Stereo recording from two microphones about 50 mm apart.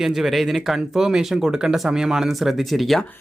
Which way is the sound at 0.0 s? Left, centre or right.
Centre.